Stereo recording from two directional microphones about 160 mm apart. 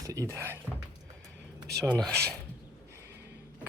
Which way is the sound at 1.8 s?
5° left (ahead or behind).